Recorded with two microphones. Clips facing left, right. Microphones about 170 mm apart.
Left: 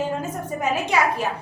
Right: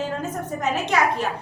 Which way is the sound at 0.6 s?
10° left (ahead or behind).